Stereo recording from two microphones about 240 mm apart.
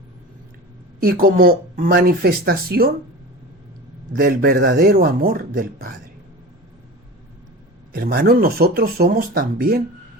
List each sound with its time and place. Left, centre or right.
0.9 s speech: right
4.1 s speech: right
7.9 s speech: right